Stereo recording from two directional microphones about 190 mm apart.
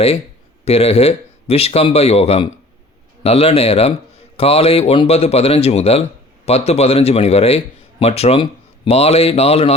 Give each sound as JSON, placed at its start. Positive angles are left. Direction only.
{"t": 0.6, "sound": "a man's voice", "side_deg": 30}